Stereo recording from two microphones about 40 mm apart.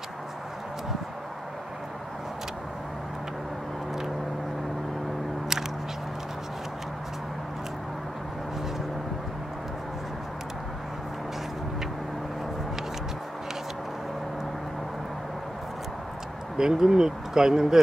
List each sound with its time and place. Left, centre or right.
16.5 s speech: centre